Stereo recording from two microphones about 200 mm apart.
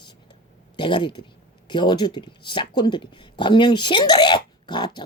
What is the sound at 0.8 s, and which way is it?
Speech, 25° left (ahead or behind).